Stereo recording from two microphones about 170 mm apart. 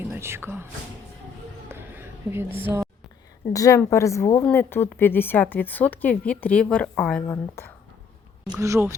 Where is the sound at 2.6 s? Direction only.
15° right (ahead or behind).